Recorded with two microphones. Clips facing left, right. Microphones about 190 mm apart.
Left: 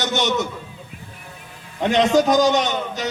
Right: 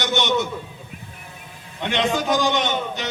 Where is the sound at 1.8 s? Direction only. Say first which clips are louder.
Left 6 dB; 40° left (ahead or behind).